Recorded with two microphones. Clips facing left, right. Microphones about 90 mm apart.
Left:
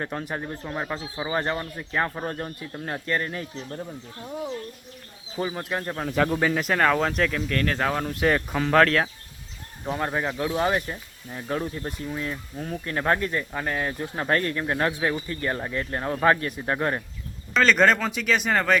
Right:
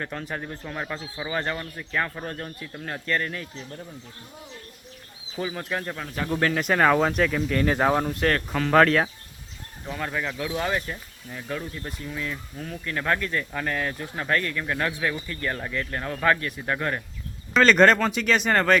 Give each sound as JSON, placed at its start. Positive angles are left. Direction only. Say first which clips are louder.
{"t": 0.0, "sound": "speech", "louder": "left 2 dB", "side_deg": 20}
{"t": 5.4, "sound": "speech", "louder": "left 1 dB", "side_deg": 15}
{"t": 8.0, "sound": "speech", "louder": "left 1 dB", "side_deg": 5}
{"t": 8.7, "sound": "speech", "louder": "right 1 dB", "side_deg": -5}
{"t": 9.8, "sound": "speech", "louder": "left 3 dB", "side_deg": 30}
{"t": 10.3, "sound": "speech", "louder": "left 4 dB", "side_deg": 15}
{"t": 14.2, "sound": "speech", "louder": "left 2 dB", "side_deg": 35}
{"t": 17.5, "sound": "speech", "louder": "right 2 dB", "side_deg": 0}